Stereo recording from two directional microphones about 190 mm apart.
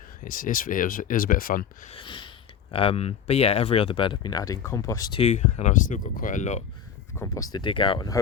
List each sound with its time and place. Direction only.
0.3 s speech: 45° left (ahead or behind)
1.9 s a sound: 25° left (ahead or behind)
2.7 s speech: 30° left (ahead or behind)
5.2 s speech: 35° left (ahead or behind)
7.1 s speech: 15° left (ahead or behind)